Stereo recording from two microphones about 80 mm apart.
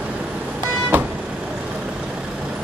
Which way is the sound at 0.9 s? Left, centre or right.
Right.